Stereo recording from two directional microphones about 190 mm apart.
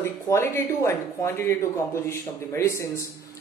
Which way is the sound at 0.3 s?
15° left (ahead or behind).